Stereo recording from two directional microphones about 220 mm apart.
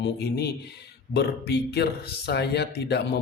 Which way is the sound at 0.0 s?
50° left (ahead or behind).